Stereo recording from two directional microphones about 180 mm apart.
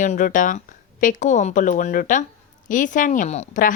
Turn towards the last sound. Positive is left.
turn(degrees=40)  # may be behind; listen again after turning